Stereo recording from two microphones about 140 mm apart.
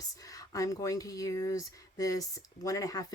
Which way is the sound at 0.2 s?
25° left (ahead or behind).